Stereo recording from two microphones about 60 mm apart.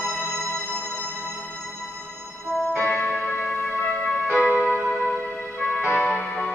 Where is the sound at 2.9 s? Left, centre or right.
Centre.